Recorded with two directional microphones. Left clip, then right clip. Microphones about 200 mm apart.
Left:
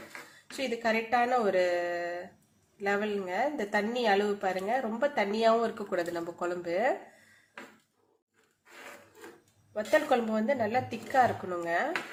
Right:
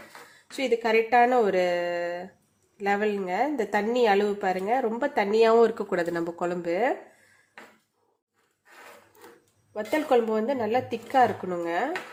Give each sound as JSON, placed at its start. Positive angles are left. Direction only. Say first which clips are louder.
{"t": 0.5, "sound": "speech", "louder": "right 7 dB", "side_deg": -30}
{"t": 9.7, "sound": "speech", "louder": "right 3 dB", "side_deg": -30}